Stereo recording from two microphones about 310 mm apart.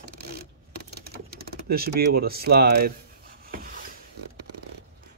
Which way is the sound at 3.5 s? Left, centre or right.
Right.